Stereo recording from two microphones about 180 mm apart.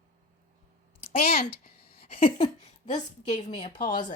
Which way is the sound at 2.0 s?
35° left (ahead or behind).